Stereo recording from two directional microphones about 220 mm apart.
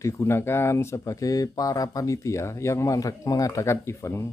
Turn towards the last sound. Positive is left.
turn(degrees=10)  # may be behind; listen again after turning